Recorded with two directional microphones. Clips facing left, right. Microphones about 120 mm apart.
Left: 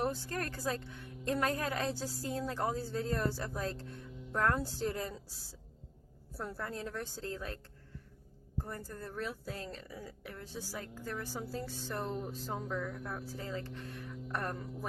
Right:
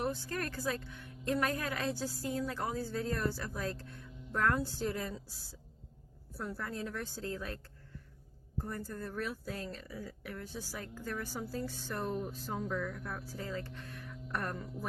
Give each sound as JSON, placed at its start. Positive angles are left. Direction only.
{"t": 0.0, "sound": "a woman's voice", "side_deg": 35}
{"t": 6.3, "sound": "a woman's voice", "side_deg": 30}
{"t": 8.7, "sound": "a woman's voice", "side_deg": 30}